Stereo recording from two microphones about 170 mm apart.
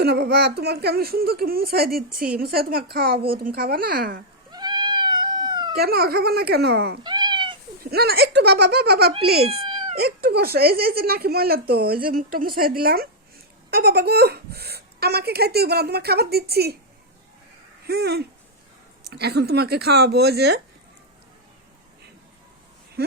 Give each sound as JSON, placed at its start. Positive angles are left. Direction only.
{"t": 0.0, "sound": "speech", "side_deg": -75}
{"t": 4.5, "sound": "cat", "side_deg": -25}
{"t": 5.7, "sound": "speech", "side_deg": -65}
{"t": 7.0, "sound": "cat", "side_deg": -25}
{"t": 7.9, "sound": "speech", "side_deg": -65}
{"t": 17.8, "sound": "speech", "side_deg": -70}